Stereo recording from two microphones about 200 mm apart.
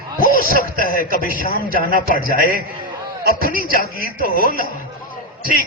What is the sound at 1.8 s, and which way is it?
Speech, 45° left (ahead or behind).